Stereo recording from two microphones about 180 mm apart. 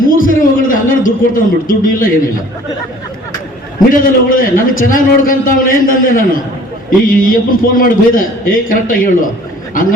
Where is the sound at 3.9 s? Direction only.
50° left (ahead or behind).